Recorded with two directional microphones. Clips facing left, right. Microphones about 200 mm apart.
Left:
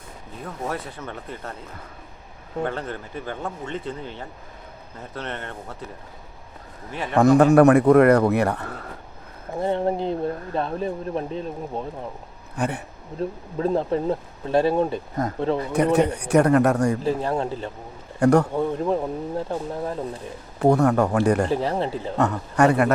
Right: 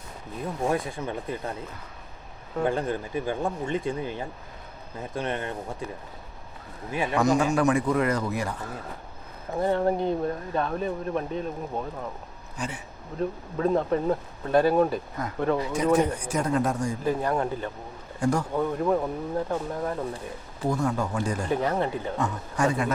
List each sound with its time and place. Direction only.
0.4 s speech: 15° right (ahead or behind)
2.6 s speech: 10° right (ahead or behind)
7.1 s speech: 55° left (ahead or behind)
9.6 s speech: 25° left (ahead or behind)
12.5 s speech: 60° left (ahead or behind)
13.1 s speech: 30° left (ahead or behind)
15.6 s speech: 60° left (ahead or behind)
17.0 s speech: 30° left (ahead or behind)
18.2 s speech: 65° left (ahead or behind)
18.5 s speech: 25° left (ahead or behind)
20.6 s speech: 65° left (ahead or behind)
21.5 s speech: 30° left (ahead or behind)
22.2 s speech: 65° left (ahead or behind)